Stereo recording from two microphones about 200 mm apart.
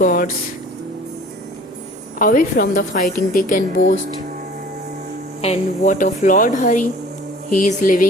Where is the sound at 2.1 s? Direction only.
45° left (ahead or behind).